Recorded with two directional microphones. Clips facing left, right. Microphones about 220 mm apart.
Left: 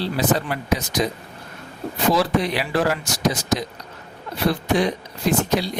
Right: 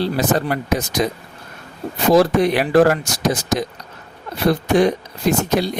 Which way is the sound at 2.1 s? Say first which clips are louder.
Right 7 dB; 45° right (ahead or behind).